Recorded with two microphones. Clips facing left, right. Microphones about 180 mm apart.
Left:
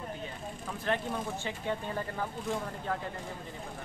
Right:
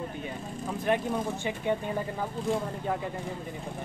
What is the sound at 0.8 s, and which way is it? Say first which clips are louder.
Speech: right 5 dB; 15° right (ahead or behind).